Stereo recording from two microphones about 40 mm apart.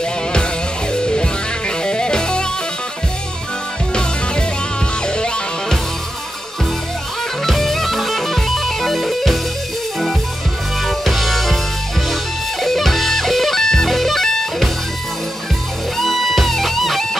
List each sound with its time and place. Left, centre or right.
0.9 s music: left
5.0 s music: left
7.4 s music: centre
10.8 s music: centre
12.6 s music: centre
16.0 s music: centre